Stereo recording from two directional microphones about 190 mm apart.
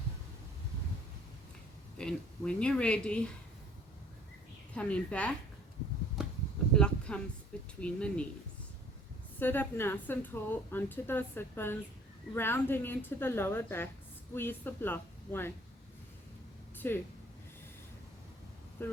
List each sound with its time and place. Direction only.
2.0 s speech: 5° left (ahead or behind)
4.7 s a woman's voice: 5° left (ahead or behind)
6.2 s a sound: 5° right (ahead or behind)
7.8 s a woman's voice: 5° left (ahead or behind)
9.4 s a woman's voice: 10° left (ahead or behind)
16.8 s a woman's voice: 10° left (ahead or behind)
18.8 s a woman's voice: 10° left (ahead or behind)